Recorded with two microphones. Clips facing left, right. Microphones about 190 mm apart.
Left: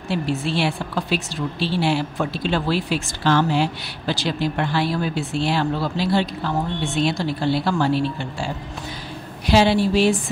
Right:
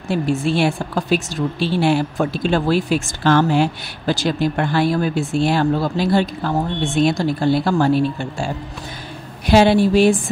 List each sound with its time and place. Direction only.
0.1 s a woman's voice: 50° right (ahead or behind)
9.5 s a woman's voice: 50° right (ahead or behind)